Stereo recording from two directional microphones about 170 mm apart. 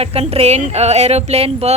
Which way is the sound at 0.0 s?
35° right (ahead or behind).